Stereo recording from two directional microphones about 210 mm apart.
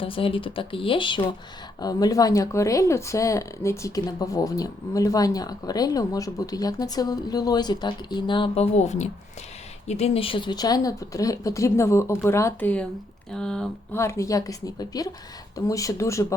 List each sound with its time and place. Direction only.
0.0 s speech: 25° left (ahead or behind)